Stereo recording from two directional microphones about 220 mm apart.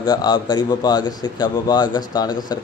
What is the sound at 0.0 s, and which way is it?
Speech, 20° left (ahead or behind).